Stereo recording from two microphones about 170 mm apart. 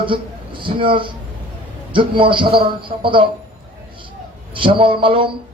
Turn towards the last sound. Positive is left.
turn(degrees=-30)  # may be behind; listen again after turning